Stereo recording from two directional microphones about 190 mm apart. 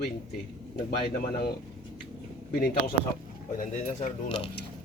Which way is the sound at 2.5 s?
55° left (ahead or behind).